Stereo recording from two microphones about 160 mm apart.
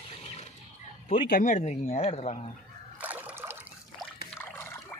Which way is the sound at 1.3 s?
50° left (ahead or behind).